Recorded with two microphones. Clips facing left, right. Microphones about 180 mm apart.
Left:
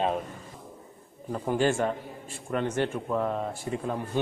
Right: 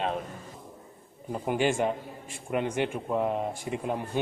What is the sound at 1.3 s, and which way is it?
Speech, 15° right (ahead or behind).